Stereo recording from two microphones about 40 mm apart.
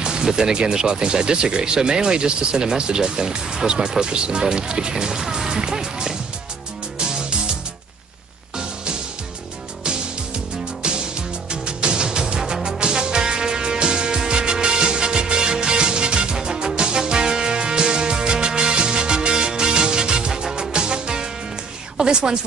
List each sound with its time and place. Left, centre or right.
0.0 s music: centre
0.3 s speech: centre
7.0 s music: right
10.8 s music: right
21.9 s a sound: centre